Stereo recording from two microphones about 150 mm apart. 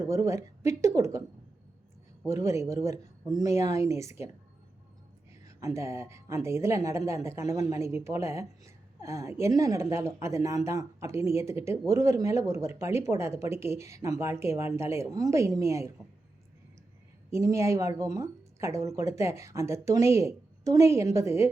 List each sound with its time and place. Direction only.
0.0 s a woman's voice: 20° right (ahead or behind)
2.2 s a woman's voice: 20° right (ahead or behind)
5.5 s a woman's voice: 20° right (ahead or behind)
17.3 s a woman's voice: 20° right (ahead or behind)